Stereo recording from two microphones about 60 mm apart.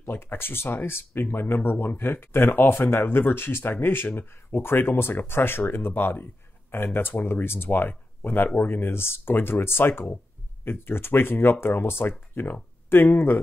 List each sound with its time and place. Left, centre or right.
0.0 s speech: left